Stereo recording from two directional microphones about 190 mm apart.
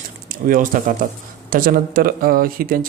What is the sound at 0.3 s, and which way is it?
Speech, 45° right (ahead or behind).